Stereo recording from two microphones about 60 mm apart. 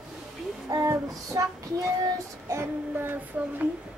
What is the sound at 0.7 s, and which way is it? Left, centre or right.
Child singing, right.